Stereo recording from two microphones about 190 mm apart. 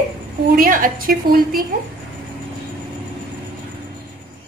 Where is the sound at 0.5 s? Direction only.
45° right (ahead or behind).